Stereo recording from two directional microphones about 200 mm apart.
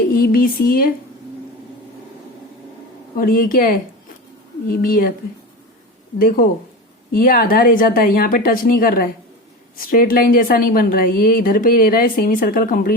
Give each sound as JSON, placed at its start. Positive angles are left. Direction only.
{"t": 0.1, "sound": "a sound", "side_deg": 45}
{"t": 3.2, "sound": "a woman's voice", "side_deg": 45}
{"t": 6.1, "sound": "a woman's voice", "side_deg": 45}